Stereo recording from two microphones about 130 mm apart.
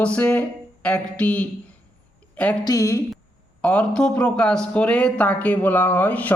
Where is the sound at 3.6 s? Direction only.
10° left (ahead or behind).